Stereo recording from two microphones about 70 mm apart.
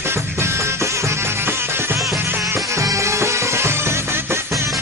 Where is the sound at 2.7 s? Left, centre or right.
Right.